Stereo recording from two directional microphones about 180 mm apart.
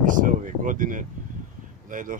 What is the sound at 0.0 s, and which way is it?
Speech, 45° right (ahead or behind).